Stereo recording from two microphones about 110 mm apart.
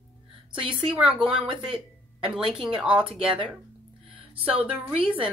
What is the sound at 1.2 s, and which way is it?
Speech, 55° right (ahead or behind).